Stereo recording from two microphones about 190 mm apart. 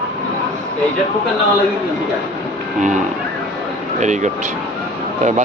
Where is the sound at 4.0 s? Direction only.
40° right (ahead or behind).